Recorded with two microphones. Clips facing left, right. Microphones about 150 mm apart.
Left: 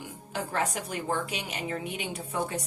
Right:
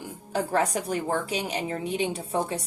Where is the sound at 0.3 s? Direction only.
35° right (ahead or behind).